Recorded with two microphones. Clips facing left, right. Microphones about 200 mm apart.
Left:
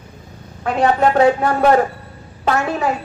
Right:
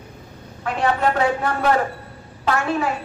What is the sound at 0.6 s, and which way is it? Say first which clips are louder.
A woman's voice: left 5 dB; 40° left (ahead or behind).